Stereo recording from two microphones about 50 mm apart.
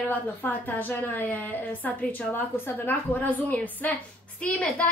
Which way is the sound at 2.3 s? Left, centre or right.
Left.